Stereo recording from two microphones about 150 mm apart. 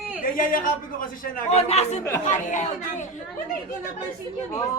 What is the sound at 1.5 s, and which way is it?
Speech, 45° left (ahead or behind).